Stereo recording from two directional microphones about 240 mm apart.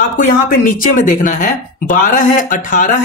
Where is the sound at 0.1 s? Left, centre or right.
Left.